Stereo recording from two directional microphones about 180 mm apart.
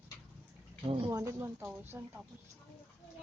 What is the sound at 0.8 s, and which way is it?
Speech, 30° right (ahead or behind).